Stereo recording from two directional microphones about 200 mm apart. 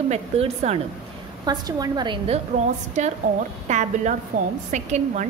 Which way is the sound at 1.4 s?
20° right (ahead or behind).